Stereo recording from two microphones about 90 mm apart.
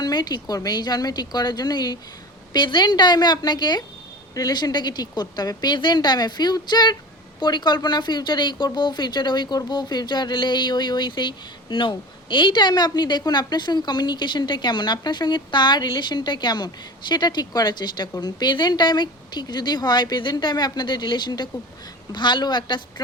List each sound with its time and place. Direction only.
0.0 s a woman's voice: 50° left (ahead or behind)